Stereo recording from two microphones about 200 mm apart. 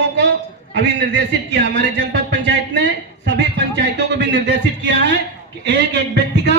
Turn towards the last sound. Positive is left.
turn(degrees=-60)  # may be behind; listen again after turning